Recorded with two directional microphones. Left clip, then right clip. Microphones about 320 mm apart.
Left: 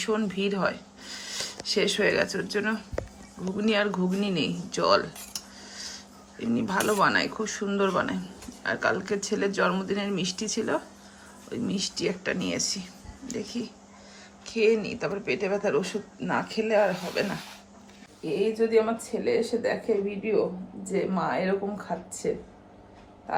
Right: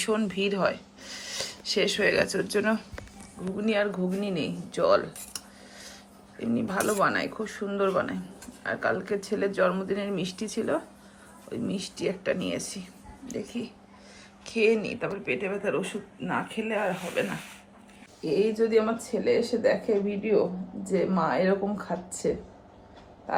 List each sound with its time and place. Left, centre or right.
0.0 s speech: centre
5.7 s a sound: centre
6.4 s speech: centre
18.3 s speech: centre